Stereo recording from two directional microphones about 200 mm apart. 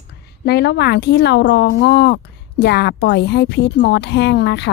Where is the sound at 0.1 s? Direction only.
55° left (ahead or behind).